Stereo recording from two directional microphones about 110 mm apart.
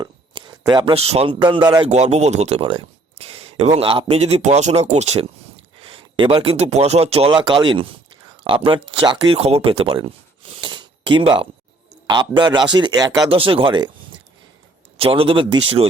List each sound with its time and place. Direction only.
0.0 s a sound: 40° right (ahead or behind)
0.9 s speech: 65° right (ahead or behind)
1.4 s speech: 45° right (ahead or behind)
1.9 s speech: 90° right; by 4.2 s 60° right (ahead or behind)
4.5 s speech: 85° right
5.8 s speech: 50° right (ahead or behind)
10.6 s a sound: 45° right (ahead or behind)
12.0 s speech: 45° right (ahead or behind)
13.3 s speech: 55° right (ahead or behind)
14.9 s speech: 60° right (ahead or behind)